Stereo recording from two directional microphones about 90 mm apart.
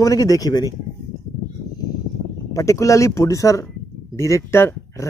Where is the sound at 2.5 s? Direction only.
35° left (ahead or behind).